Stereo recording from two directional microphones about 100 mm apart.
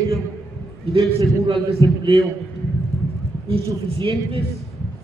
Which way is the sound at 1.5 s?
65° right (ahead or behind).